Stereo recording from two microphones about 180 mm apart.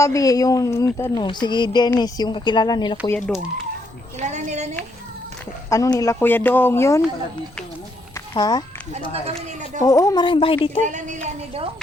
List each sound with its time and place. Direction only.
0.0 s speech: 20° left (ahead or behind)
3.2 s speech: centre (ahead or behind)
4.2 s a woman's voice: 40° right (ahead or behind)
5.6 s speech: 15° left (ahead or behind)
8.3 s a child's voice: 20° left (ahead or behind)
9.8 s speech: 20° left (ahead or behind)
10.8 s speech: 45° right (ahead or behind)